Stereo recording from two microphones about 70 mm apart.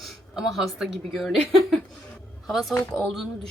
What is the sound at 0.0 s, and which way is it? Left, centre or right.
A woman's voice, centre.